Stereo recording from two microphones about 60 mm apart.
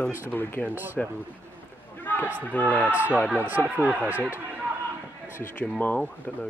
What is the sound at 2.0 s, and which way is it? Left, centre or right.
Speech, left.